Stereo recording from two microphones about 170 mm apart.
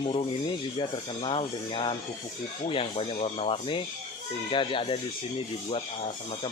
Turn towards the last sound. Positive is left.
turn(degrees=35)  # may be behind; listen again after turning